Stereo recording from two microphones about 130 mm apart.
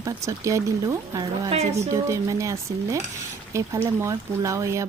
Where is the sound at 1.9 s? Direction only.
25° right (ahead or behind).